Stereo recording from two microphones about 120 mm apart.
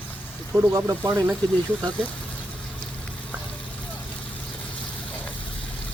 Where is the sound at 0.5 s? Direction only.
25° right (ahead or behind).